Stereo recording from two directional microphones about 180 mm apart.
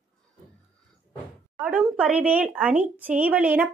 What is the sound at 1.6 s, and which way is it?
A woman's voice, 5° right (ahead or behind).